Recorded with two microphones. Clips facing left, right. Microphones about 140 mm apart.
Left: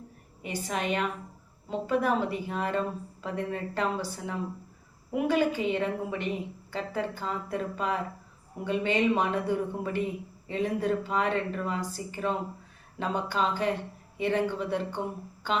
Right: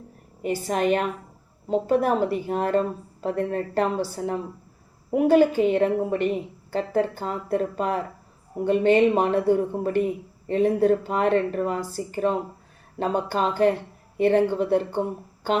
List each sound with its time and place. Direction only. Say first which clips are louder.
0.4 s speech: right 8 dB; 45° right (ahead or behind)
13.0 s speech: right 5 dB; 50° right (ahead or behind)